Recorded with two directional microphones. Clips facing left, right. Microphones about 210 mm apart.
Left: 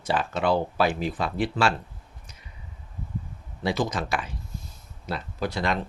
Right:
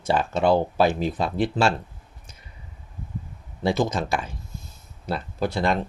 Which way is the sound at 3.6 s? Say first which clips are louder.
Right 3 dB; 25° right (ahead or behind).